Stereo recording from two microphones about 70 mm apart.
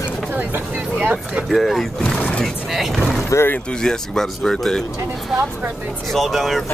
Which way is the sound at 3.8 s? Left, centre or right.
Centre.